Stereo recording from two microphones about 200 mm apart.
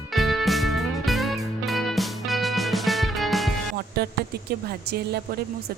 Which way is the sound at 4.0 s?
50° right (ahead or behind).